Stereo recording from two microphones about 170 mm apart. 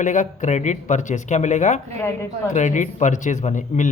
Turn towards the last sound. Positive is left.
turn(degrees=45)  # may be behind; listen again after turning